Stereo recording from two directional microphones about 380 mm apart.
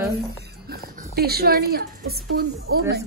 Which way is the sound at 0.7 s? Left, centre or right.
Right.